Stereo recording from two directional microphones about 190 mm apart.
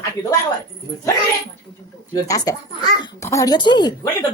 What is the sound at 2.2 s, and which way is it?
Speech, 20° left (ahead or behind).